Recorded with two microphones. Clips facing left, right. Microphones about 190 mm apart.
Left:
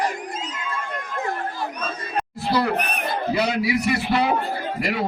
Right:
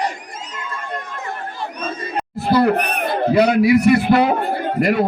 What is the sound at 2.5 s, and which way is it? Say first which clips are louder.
A man's voice: right 7 dB; 55° right (ahead or behind).